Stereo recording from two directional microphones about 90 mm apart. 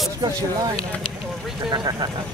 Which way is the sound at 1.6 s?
55° right (ahead or behind).